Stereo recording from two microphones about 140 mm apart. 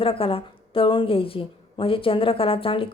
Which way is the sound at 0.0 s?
40° left (ahead or behind).